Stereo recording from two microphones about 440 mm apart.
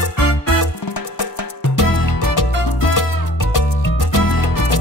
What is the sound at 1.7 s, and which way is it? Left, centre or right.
Music, left.